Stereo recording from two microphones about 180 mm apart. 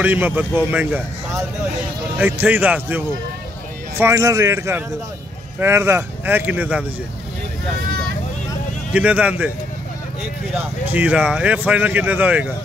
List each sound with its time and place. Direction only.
0.0 s speech: 10° right (ahead or behind)
4.0 s speech: 20° right (ahead or behind)
8.9 s speech: 5° right (ahead or behind)
10.5 s speech: 10° right (ahead or behind)